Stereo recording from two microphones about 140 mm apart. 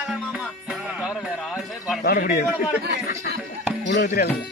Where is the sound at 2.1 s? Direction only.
80° left.